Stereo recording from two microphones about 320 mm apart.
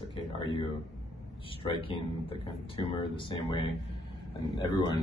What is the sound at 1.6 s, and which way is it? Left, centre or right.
Speech, centre.